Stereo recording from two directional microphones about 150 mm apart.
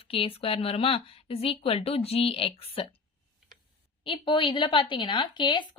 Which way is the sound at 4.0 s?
35° left (ahead or behind).